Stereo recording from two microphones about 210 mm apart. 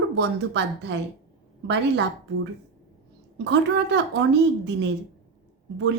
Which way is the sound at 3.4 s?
55° right (ahead or behind).